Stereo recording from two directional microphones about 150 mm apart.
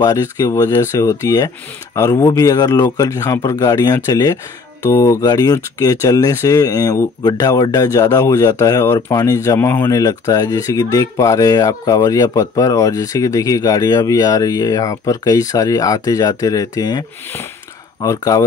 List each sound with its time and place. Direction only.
0.0 s speech: 25° left (ahead or behind)
18.0 s speech: 20° left (ahead or behind)